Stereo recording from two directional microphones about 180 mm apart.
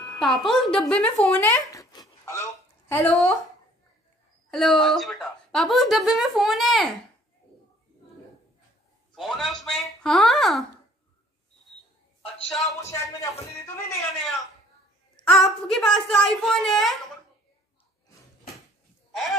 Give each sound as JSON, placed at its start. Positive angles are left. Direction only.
{"t": 0.2, "sound": "speech", "side_deg": 0}
{"t": 1.2, "sound": "a sound", "side_deg": 5}
{"t": 2.9, "sound": "speech", "side_deg": 10}
{"t": 4.5, "sound": "speech", "side_deg": 0}
{"t": 9.1, "sound": "speech", "side_deg": 0}
{"t": 12.4, "sound": "speech", "side_deg": 0}
{"t": 12.8, "sound": "speech", "side_deg": 15}
{"t": 14.2, "sound": "speech", "side_deg": 0}